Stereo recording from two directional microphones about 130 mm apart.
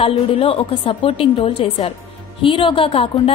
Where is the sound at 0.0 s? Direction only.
45° left (ahead or behind).